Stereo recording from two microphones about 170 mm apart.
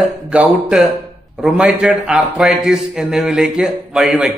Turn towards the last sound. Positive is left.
turn(degrees=0)  # may be behind; listen again after turning